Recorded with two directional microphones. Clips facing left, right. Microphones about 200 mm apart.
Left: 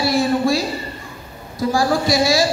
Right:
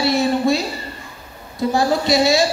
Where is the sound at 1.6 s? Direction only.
25° right (ahead or behind).